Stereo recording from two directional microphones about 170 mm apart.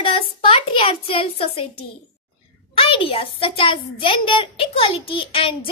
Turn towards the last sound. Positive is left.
turn(degrees=30)  # may be behind; listen again after turning